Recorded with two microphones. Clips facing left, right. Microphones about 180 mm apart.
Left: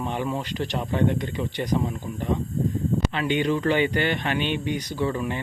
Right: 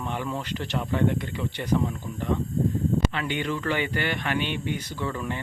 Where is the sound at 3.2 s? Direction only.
20° left (ahead or behind).